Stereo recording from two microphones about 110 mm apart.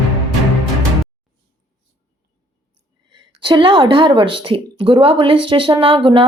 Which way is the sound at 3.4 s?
50° right (ahead or behind).